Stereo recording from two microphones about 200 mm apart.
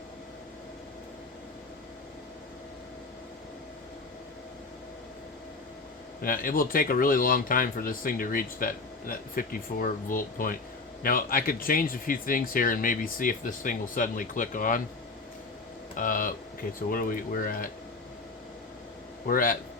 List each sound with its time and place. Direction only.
6.2 s speech: 45° left (ahead or behind)
16.0 s speech: 45° left (ahead or behind)
19.3 s speech: 45° left (ahead or behind)